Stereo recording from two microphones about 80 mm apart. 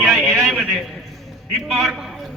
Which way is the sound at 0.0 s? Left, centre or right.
Centre.